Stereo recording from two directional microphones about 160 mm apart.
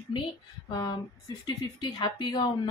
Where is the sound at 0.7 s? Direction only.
25° left (ahead or behind).